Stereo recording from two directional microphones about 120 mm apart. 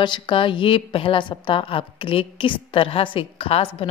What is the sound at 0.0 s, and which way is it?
A woman's voice, 45° left (ahead or behind).